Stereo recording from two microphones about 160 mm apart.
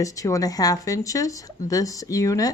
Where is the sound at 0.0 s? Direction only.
20° left (ahead or behind).